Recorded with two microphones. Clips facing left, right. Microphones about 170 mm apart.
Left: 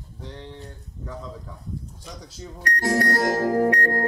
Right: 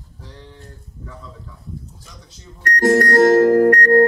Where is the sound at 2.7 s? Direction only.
50° right (ahead or behind).